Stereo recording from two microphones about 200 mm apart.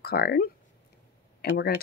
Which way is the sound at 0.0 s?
50° left (ahead or behind).